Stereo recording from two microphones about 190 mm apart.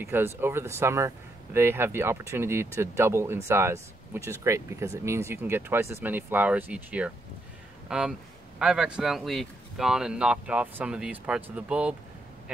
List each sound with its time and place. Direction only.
0.0 s a man's voice: 15° right (ahead or behind)